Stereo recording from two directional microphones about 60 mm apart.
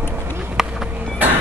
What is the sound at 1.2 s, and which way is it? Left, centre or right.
Music, right.